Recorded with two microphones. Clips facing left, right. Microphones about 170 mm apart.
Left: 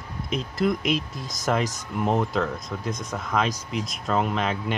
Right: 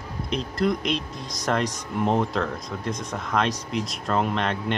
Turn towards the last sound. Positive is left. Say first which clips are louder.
# even
turn(degrees=0)  # may be behind; listen again after turning